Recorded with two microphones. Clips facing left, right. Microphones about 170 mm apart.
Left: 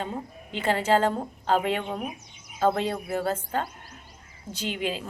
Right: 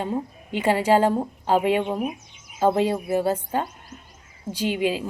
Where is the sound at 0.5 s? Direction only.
10° right (ahead or behind).